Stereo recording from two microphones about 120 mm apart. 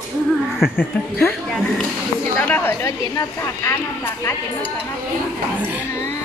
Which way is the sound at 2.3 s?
20° left (ahead or behind).